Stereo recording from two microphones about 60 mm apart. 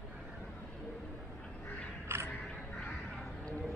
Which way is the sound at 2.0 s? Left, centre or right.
Right.